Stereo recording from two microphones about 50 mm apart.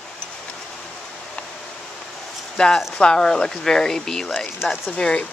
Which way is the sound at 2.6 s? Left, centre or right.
Left.